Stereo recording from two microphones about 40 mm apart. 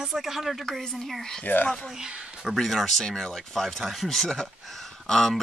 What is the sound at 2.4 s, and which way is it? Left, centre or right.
Speech, centre.